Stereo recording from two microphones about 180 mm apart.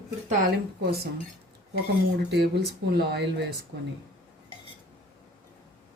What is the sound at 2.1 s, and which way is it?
Speech, 65° right (ahead or behind).